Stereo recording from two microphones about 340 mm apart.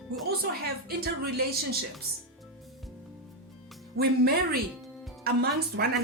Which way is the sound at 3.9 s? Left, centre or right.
Right.